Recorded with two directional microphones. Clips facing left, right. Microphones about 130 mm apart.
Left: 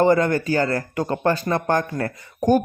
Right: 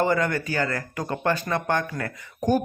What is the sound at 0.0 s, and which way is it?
Speech, 35° left (ahead or behind).